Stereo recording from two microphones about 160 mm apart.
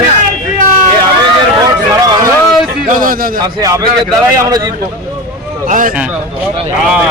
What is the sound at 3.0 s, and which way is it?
Speech, 65° right (ahead or behind).